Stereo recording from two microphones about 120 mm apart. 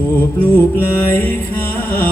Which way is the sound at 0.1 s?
15° left (ahead or behind).